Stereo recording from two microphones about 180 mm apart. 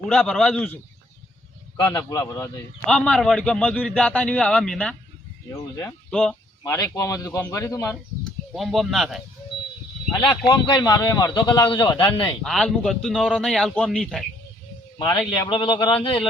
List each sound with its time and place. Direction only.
0.1 s a man's voice: 5° left (ahead or behind)
1.7 s a man's voice: 20° left (ahead or behind)
2.8 s a man's voice: 5° left (ahead or behind)
5.5 s a man's voice: 15° left (ahead or behind)
6.1 s speech: 5° left (ahead or behind)
6.6 s a man's voice: 20° left (ahead or behind)
8.5 s a man's voice: centre (ahead or behind)
10.1 s speech: 25° left (ahead or behind)
12.4 s a man's voice: 5° left (ahead or behind)
14.9 s a man's voice: 25° left (ahead or behind)